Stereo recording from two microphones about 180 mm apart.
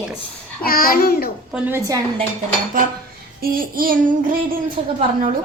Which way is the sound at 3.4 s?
55° right (ahead or behind).